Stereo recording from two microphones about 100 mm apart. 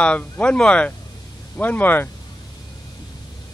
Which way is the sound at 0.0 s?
10° left (ahead or behind).